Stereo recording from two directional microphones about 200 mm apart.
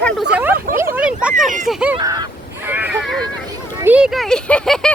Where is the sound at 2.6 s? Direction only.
10° right (ahead or behind).